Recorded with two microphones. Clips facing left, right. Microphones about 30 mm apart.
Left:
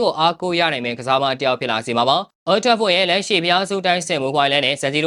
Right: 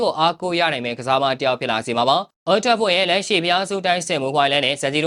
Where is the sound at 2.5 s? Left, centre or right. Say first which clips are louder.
Left 1 dB; left.